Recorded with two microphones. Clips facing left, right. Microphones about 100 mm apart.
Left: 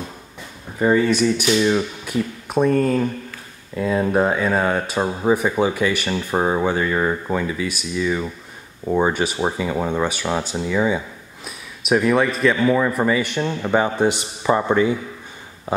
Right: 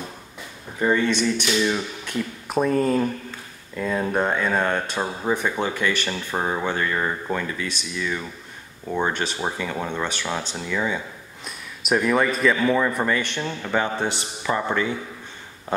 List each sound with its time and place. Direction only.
0.7 s speech: 10° left (ahead or behind)
2.1 s speech: centre (ahead or behind); by 11.0 s 15° left (ahead or behind)
11.4 s speech: centre (ahead or behind); by 15.0 s 20° left (ahead or behind)